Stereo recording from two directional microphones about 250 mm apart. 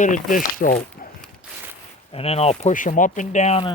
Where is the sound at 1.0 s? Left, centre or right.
Left.